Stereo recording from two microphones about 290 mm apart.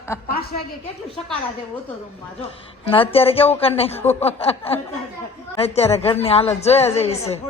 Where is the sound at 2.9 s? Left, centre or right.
Centre.